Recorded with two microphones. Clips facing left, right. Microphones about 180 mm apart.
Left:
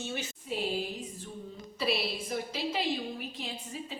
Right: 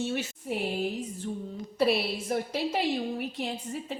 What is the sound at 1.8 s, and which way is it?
A woman's voice, 60° right (ahead or behind).